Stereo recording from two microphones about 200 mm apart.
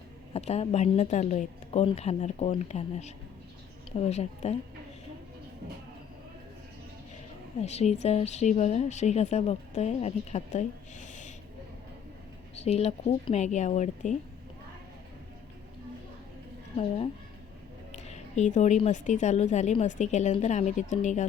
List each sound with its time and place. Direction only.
0.3 s a woman's voice: 30° left (ahead or behind)
7.6 s a woman's voice: 35° left (ahead or behind)
12.6 s a woman's voice: 30° left (ahead or behind)
17.9 s a woman's voice: 35° left (ahead or behind)